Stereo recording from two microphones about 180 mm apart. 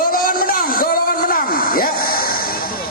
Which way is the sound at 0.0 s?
55° left (ahead or behind).